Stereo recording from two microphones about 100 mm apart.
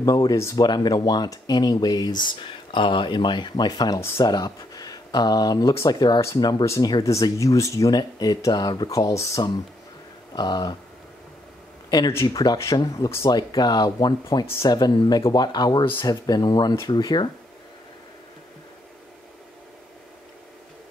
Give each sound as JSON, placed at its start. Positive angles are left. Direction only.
{"t": 0.0, "sound": "speech", "side_deg": 40}
{"t": 6.2, "sound": "speech", "side_deg": 30}
{"t": 10.3, "sound": "speech", "side_deg": 45}
{"t": 12.7, "sound": "speech", "side_deg": 40}
{"t": 14.4, "sound": "speech", "side_deg": 25}
{"t": 14.7, "sound": "speech", "side_deg": 45}